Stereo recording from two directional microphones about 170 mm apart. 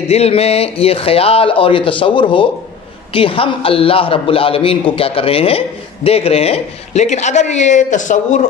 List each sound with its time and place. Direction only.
0.1 s a man's voice: 35° left (ahead or behind)